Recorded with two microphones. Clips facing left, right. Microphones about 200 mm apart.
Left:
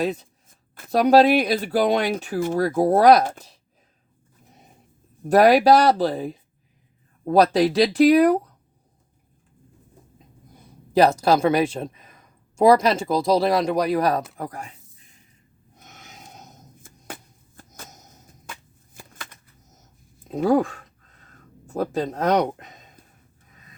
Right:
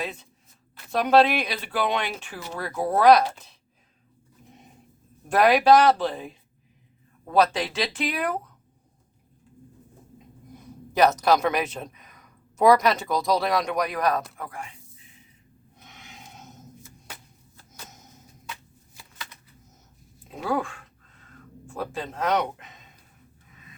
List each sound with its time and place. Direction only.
0.0 s speech: 40° left (ahead or behind)
5.3 s speech: 35° left (ahead or behind)
10.9 s speech: 30° left (ahead or behind)
14.3 s a sound: 40° left (ahead or behind)
20.2 s speech: 40° left (ahead or behind)